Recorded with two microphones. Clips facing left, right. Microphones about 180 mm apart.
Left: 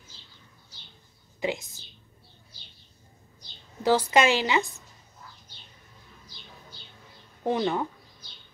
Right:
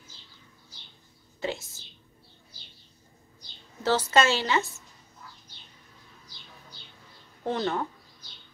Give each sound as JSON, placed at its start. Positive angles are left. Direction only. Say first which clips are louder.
{"t": 1.4, "sound": "a woman's voice", "louder": "left 3 dB", "side_deg": 15}
{"t": 3.8, "sound": "a woman's voice", "louder": "left 2 dB", "side_deg": 15}
{"t": 7.4, "sound": "a woman's voice", "louder": "left 2 dB", "side_deg": 15}